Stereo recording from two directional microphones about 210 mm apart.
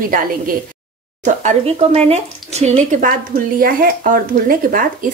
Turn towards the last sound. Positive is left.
turn(degrees=-40)  # may be behind; listen again after turning